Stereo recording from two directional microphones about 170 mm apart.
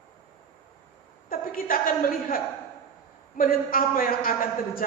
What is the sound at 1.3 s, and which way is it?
A woman's voice, 55° left (ahead or behind).